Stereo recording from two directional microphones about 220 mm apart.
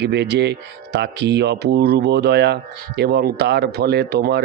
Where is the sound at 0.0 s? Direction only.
50° right (ahead or behind).